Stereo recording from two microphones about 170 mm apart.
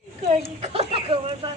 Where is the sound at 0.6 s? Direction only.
35° right (ahead or behind).